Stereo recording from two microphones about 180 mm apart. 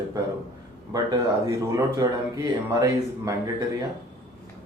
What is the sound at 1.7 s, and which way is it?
Speech, 20° right (ahead or behind).